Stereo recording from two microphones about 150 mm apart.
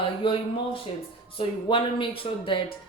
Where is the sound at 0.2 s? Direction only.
35° left (ahead or behind).